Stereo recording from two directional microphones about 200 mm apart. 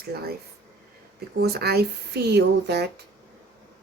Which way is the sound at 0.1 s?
50° right (ahead or behind).